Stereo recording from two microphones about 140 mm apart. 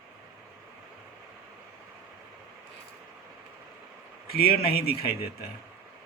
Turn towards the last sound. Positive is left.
turn(degrees=90)